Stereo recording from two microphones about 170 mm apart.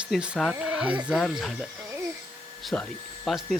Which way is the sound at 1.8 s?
15° right (ahead or behind).